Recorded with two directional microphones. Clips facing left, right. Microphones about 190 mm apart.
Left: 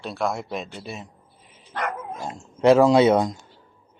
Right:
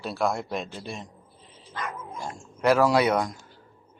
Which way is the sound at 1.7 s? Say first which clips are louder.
Left 6 dB; 65° left (ahead or behind).